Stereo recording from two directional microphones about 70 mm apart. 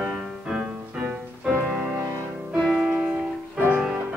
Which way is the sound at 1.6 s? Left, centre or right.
Centre.